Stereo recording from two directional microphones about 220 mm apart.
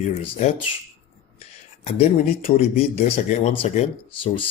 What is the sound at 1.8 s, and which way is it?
A man's voice, 30° left (ahead or behind).